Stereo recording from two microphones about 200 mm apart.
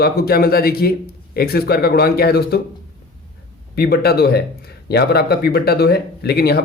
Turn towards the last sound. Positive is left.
turn(degrees=50)  # may be behind; listen again after turning